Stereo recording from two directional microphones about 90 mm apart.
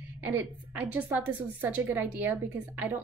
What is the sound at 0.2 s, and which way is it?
A woman's voice, 20° right (ahead or behind).